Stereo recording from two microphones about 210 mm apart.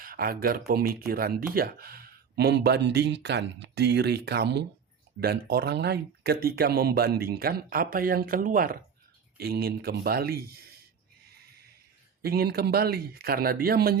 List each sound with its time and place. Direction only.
0.0 s speech: 45° right (ahead or behind)
12.2 s speech: 45° right (ahead or behind)